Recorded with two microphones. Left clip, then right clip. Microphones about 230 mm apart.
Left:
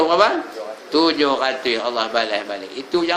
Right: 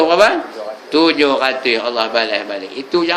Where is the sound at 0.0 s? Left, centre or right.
Centre.